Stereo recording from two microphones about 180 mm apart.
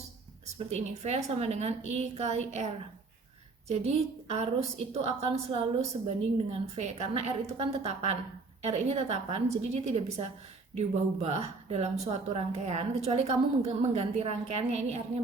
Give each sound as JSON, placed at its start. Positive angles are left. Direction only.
{"t": 0.4, "sound": "speech", "side_deg": -40}
{"t": 3.7, "sound": "speech", "side_deg": -35}